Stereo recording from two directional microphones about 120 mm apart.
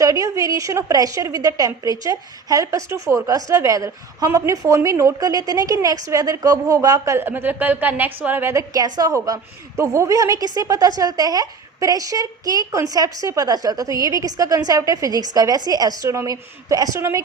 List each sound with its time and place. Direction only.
0.0 s a woman's voice: 30° right (ahead or behind)